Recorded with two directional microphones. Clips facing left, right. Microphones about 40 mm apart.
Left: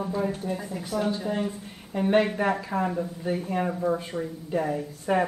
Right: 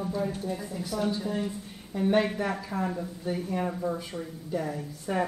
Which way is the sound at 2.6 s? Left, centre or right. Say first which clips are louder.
Left 4 dB; left.